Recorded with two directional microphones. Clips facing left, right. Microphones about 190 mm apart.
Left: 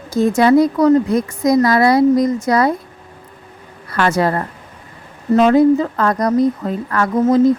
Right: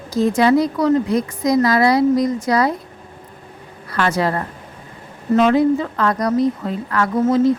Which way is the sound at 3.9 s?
50° left (ahead or behind).